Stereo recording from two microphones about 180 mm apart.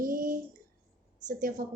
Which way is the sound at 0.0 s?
50° right (ahead or behind).